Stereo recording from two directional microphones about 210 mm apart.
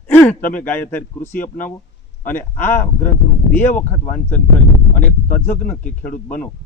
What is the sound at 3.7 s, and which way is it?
Speech, 35° left (ahead or behind).